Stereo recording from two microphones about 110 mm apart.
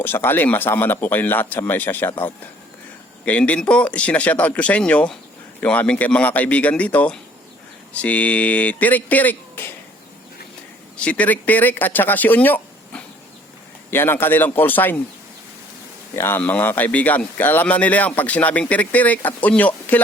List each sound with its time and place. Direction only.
0.0 s a man's voice: 20° left (ahead or behind)
11.0 s a man's voice: 10° left (ahead or behind)
16.1 s a man's voice: 20° left (ahead or behind)